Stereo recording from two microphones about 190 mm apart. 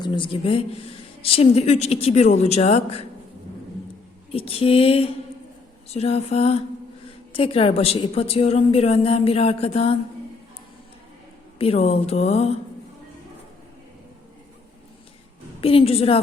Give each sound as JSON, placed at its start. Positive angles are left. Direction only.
{"t": 0.0, "sound": "speech", "side_deg": 25}
{"t": 4.3, "sound": "speech", "side_deg": 30}
{"t": 11.5, "sound": "speech", "side_deg": 30}
{"t": 15.6, "sound": "speech", "side_deg": 30}